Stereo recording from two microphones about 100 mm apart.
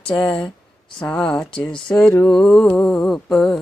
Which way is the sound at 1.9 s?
10° left (ahead or behind).